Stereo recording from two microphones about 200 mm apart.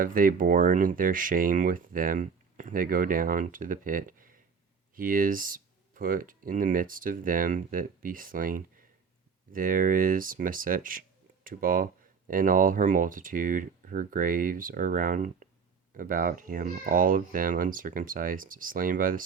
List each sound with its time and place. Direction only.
0.0 s speech: 45° right (ahead or behind)